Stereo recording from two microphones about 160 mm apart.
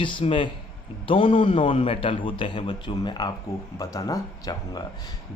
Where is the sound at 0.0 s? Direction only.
30° left (ahead or behind).